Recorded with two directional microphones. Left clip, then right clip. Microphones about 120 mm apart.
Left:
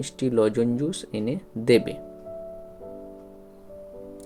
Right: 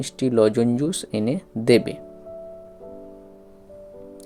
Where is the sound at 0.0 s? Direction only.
35° right (ahead or behind).